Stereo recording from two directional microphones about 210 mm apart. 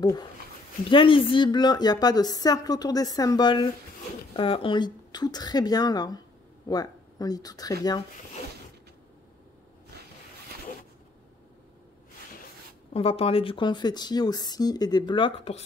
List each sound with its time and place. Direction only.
0.0 s a woman's voice: 20° left (ahead or behind)
12.9 s a woman's voice: 25° left (ahead or behind)